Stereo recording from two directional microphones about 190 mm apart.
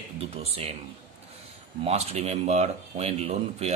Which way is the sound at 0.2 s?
30° right (ahead or behind).